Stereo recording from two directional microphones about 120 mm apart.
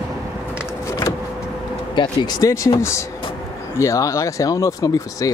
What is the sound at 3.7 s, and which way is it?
Speech, 25° left (ahead or behind).